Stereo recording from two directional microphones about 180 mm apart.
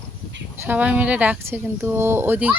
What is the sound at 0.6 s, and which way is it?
Speech, 10° right (ahead or behind).